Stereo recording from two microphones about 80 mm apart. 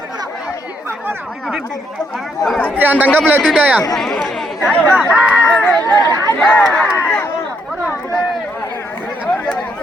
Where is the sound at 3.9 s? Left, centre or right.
Centre.